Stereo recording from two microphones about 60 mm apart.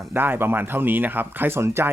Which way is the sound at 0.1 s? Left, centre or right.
Right.